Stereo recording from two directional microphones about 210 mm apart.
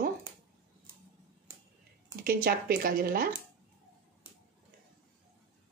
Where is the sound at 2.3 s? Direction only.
45° right (ahead or behind).